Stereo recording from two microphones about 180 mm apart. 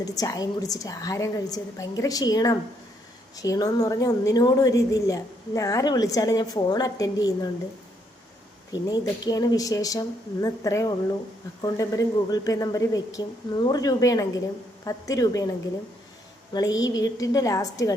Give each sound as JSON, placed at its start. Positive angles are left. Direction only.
{"t": 0.0, "sound": "a woman's voice", "side_deg": 20}
{"t": 8.7, "sound": "a woman's voice", "side_deg": 20}
{"t": 16.5, "sound": "a woman's voice", "side_deg": 20}